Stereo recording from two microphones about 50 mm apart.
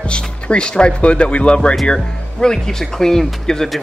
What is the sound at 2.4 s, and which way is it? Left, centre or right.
Speech, centre.